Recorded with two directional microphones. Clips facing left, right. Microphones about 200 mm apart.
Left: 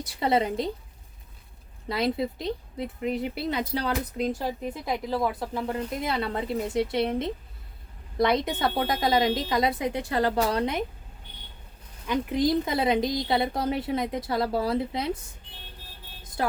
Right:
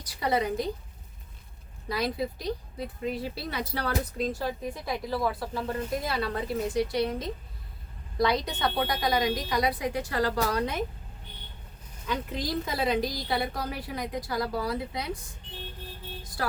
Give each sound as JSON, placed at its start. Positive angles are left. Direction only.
{"t": 0.0, "sound": "a woman's voice", "side_deg": 25}
{"t": 1.9, "sound": "a woman's voice", "side_deg": 25}
{"t": 12.0, "sound": "a woman's voice", "side_deg": 20}
{"t": 16.4, "sound": "a woman's voice", "side_deg": 20}